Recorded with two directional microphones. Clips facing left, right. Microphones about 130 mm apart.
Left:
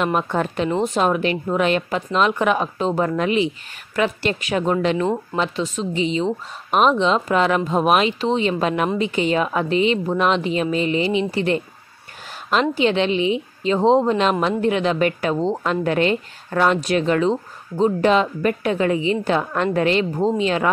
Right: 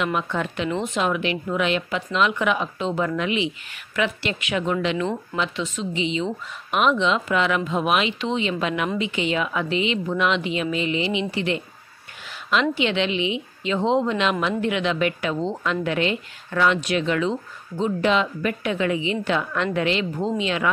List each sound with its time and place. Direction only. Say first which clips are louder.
0.0 s a woman's voice: left 4 dB; 40° left (ahead or behind)